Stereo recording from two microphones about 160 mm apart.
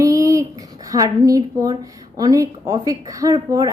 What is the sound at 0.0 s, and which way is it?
A woman's voice, 20° right (ahead or behind).